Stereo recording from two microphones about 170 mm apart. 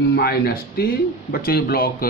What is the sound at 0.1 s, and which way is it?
Speech, 70° left (ahead or behind).